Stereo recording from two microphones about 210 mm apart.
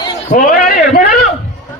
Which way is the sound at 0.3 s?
40° left (ahead or behind).